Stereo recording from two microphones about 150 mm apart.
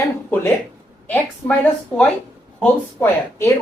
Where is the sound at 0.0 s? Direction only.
15° left (ahead or behind).